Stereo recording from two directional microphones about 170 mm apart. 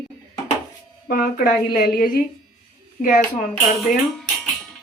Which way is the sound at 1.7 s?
60° left (ahead or behind).